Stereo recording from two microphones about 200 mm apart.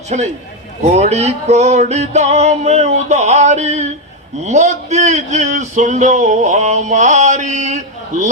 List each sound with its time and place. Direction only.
0.1 s a man's voice: 35° right (ahead or behind)